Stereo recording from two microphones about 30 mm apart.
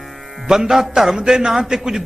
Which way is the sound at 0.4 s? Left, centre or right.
Centre.